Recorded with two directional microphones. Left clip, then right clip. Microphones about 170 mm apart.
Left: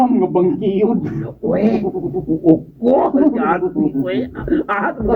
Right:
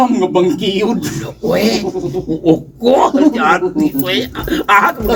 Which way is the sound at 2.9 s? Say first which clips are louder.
Right 3 dB; 30° right (ahead or behind).